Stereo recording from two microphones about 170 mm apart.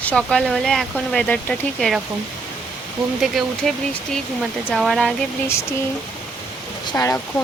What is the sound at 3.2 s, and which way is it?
Speech, centre (ahead or behind).